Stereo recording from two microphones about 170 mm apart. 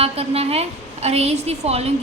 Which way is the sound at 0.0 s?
35° right (ahead or behind).